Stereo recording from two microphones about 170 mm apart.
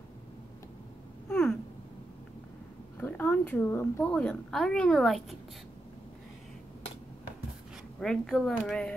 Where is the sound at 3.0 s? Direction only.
10° left (ahead or behind).